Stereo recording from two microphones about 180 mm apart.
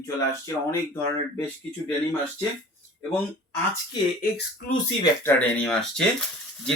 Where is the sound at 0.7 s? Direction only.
15° left (ahead or behind).